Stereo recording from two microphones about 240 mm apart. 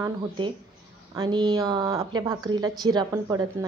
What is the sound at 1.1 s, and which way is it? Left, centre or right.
A woman's voice, centre.